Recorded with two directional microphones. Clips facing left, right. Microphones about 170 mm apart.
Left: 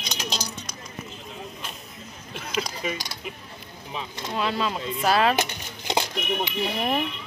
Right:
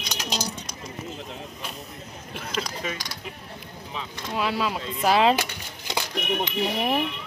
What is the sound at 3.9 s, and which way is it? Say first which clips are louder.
Speech: left 1 dB; 15° left (ahead or behind).